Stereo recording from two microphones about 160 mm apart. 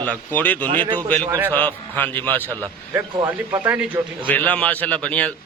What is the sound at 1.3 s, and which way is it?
Speech, 15° right (ahead or behind).